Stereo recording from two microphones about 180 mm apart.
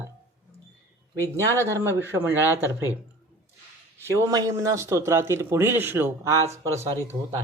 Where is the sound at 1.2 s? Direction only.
15° right (ahead or behind).